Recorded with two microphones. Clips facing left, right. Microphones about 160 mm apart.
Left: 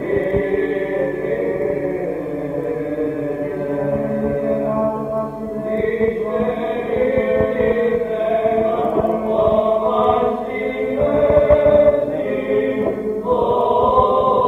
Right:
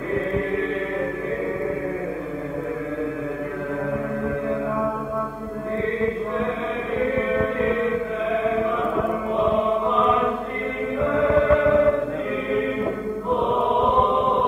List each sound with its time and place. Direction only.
0.1 s chant: 30° left (ahead or behind)
5.9 s chant: 25° left (ahead or behind)
7.0 s music: 25° left (ahead or behind)
13.3 s chant: 20° left (ahead or behind)